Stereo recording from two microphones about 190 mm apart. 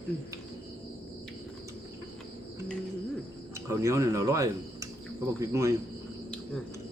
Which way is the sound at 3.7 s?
15° right (ahead or behind).